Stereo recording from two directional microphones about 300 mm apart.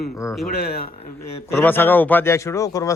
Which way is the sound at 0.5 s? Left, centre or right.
Left.